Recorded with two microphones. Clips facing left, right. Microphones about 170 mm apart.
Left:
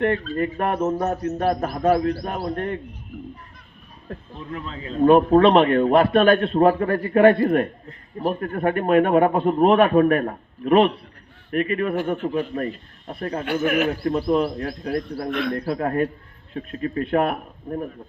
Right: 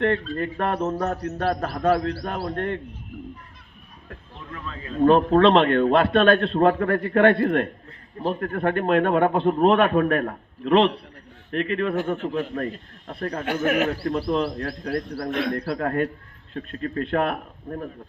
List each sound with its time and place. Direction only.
0.0 s a man's voice: 10° left (ahead or behind)
4.5 s a man's voice: 20° left (ahead or behind)
15.3 s a man's voice: 35° right (ahead or behind)
15.5 s a man's voice: 15° left (ahead or behind)